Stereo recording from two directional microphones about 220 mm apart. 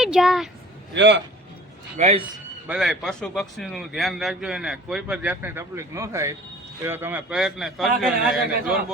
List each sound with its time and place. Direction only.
0.0 s a woman's voice: centre (ahead or behind)
0.9 s a man's voice: 55° right (ahead or behind)
2.0 s a man's voice: 30° right (ahead or behind)
2.6 s a man's voice: centre (ahead or behind)